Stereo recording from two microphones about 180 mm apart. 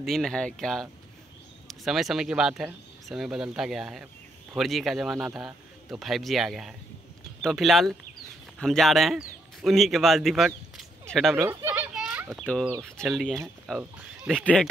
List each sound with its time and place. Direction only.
0.0 s speech: centre (ahead or behind)
11.4 s children playing: 10° right (ahead or behind)
13.1 s speech: centre (ahead or behind)